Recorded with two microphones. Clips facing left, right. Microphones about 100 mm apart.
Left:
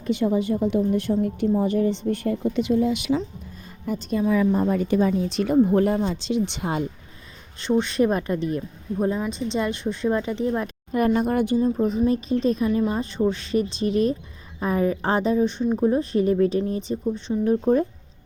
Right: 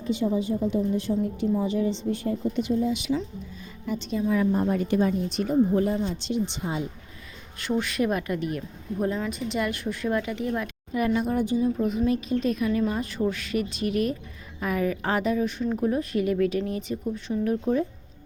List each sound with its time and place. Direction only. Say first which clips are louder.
0.0 s a woman's voice: left 3 dB; 60° left (ahead or behind)
3.8 s speech: left 3 dB; 45° left (ahead or behind)
5.1 s speech: left 4 dB; 90° left; by 6.8 s 65° left (ahead or behind)
7.6 s a woman's voice: left 5 dB; 25° left (ahead or behind)
10.9 s speech: left 4 dB; 45° left (ahead or behind)
11.3 s a woman's voice: left 3 dB; 60° left (ahead or behind)
11.6 s a woman's voice: left 3 dB; 35° left (ahead or behind)